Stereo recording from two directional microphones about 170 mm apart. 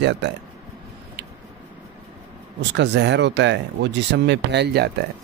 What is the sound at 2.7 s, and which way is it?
Speech, 90° right.